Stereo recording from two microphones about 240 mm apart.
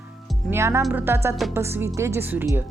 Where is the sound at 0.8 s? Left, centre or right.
Centre.